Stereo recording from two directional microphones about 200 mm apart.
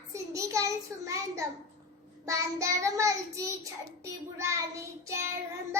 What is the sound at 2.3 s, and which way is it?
Child singing, 15° right (ahead or behind).